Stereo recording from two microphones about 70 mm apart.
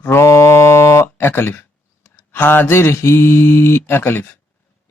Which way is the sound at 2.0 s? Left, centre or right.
Left.